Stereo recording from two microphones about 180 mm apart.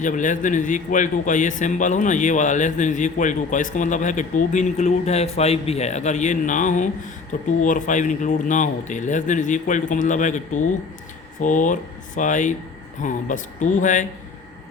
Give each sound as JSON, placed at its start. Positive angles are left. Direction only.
{"t": 0.0, "sound": "a man's voice", "side_deg": 45}